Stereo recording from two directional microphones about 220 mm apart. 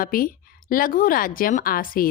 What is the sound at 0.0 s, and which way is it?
A woman's voice, 40° left (ahead or behind).